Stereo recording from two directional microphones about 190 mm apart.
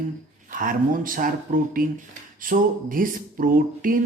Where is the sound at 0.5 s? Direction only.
45° right (ahead or behind).